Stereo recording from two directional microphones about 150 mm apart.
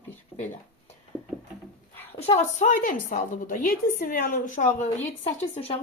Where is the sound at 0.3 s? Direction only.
55° left (ahead or behind).